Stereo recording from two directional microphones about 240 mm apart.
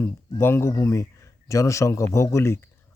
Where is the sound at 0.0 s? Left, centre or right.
Centre.